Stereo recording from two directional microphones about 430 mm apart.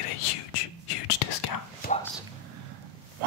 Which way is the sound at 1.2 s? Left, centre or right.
Left.